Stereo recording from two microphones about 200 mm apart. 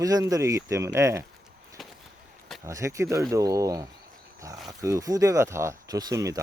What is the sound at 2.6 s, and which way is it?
Speech, 15° right (ahead or behind).